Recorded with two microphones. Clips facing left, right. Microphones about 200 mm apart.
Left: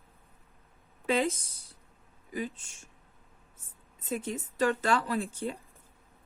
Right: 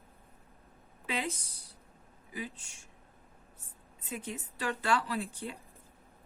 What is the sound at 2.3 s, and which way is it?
Speech, 50° left (ahead or behind).